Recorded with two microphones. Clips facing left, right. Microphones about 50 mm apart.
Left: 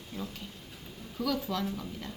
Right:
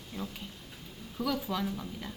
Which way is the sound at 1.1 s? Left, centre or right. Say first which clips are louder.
Left 1 dB; centre.